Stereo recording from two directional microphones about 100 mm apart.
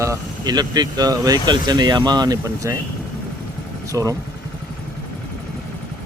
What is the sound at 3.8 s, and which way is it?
Speech, 30° right (ahead or behind).